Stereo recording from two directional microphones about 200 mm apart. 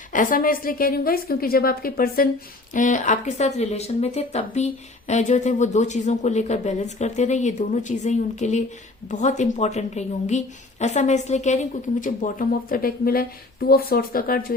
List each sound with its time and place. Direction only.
0.1 s a woman's voice: 45° left (ahead or behind)